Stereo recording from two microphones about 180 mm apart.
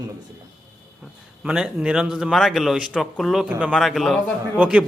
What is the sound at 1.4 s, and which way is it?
A man's voice, 5° right (ahead or behind).